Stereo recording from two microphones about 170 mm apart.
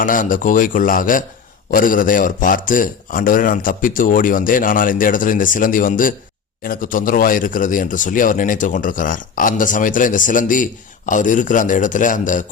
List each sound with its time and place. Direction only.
0.0 s speech: 50° left (ahead or behind)